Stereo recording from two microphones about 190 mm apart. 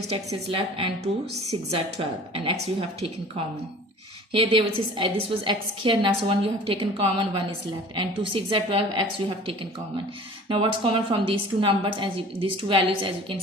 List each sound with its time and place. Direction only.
0.1 s a woman's voice: 30° right (ahead or behind)
4.3 s a woman's voice: 30° right (ahead or behind)
10.5 s a woman's voice: 25° right (ahead or behind)